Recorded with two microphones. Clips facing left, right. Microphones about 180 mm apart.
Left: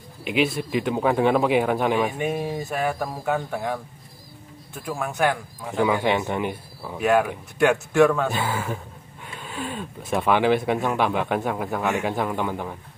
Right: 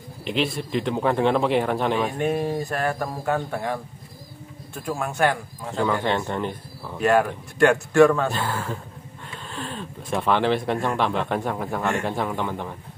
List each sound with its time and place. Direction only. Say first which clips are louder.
0.2 s speech: left 2 dB; 5° left (ahead or behind)
4.8 s speech: right 1 dB; centre (ahead or behind)